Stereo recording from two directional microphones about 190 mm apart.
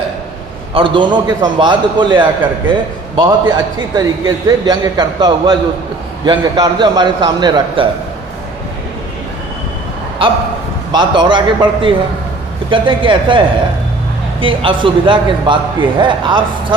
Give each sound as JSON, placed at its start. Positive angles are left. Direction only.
{"t": 0.7, "sound": "a man's voice", "side_deg": -25}
{"t": 10.2, "sound": "a man's voice", "side_deg": -25}
{"t": 14.4, "sound": "a man's voice", "side_deg": -25}